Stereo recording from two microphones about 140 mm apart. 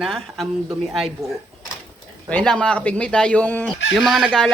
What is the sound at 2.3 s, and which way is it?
Speech, 5° left (ahead or behind).